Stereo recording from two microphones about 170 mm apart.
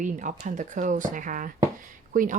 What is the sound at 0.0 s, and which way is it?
Speech, 50° right (ahead or behind).